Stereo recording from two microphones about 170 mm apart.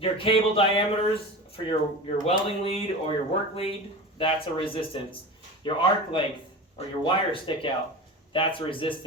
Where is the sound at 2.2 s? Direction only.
35° left (ahead or behind).